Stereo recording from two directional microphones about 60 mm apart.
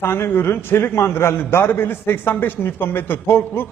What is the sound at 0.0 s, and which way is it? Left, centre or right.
A man's voice, left.